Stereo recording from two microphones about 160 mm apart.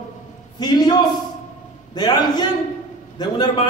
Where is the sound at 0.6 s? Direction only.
25° left (ahead or behind).